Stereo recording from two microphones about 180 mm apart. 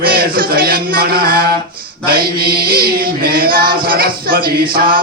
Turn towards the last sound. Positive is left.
turn(degrees=-55)  # may be behind; listen again after turning